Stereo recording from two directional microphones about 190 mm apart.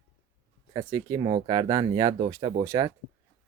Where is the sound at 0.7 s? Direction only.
20° right (ahead or behind).